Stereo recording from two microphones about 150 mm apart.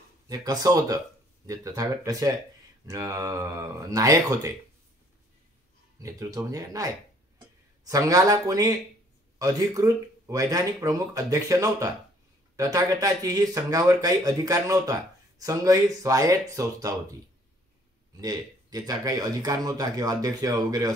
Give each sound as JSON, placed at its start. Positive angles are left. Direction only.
{"t": 0.3, "sound": "speech", "side_deg": -25}
{"t": 6.0, "sound": "speech", "side_deg": -25}